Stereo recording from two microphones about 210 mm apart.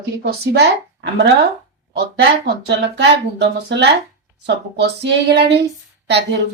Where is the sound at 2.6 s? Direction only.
55° right (ahead or behind).